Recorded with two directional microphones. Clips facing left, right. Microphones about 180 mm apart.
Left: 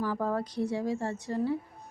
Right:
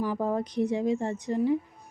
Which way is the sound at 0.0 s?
20° right (ahead or behind).